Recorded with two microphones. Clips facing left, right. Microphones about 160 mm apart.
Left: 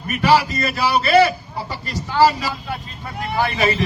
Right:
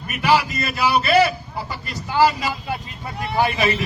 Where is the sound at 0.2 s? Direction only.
35° left (ahead or behind).